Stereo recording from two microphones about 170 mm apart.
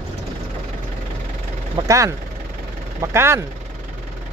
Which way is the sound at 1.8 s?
20° right (ahead or behind).